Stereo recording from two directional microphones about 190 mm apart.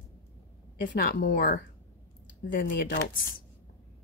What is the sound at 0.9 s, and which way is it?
Speech, 50° left (ahead or behind).